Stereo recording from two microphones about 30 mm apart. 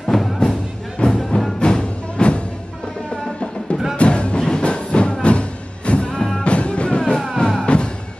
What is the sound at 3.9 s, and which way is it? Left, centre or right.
Music, left.